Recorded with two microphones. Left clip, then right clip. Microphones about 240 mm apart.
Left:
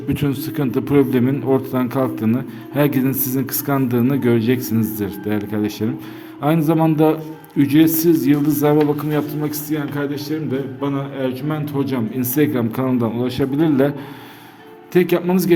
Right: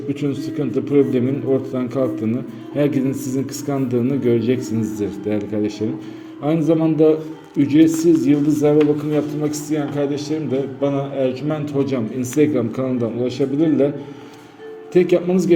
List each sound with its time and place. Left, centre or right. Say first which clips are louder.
0.1 s a man's voice: left 2 dB; left
14.9 s a man's voice: right 1 dB; left